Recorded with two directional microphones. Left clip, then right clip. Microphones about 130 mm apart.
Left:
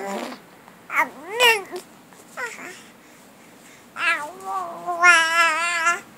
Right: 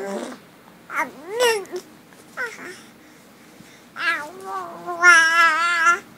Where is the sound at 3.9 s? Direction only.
10° left (ahead or behind).